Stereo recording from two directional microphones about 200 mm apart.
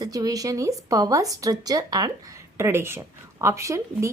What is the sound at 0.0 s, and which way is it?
A woman's voice, 20° right (ahead or behind).